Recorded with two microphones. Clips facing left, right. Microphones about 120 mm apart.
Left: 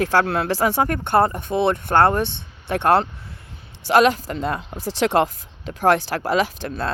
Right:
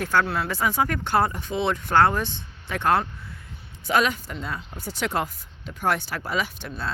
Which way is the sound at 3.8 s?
80° left.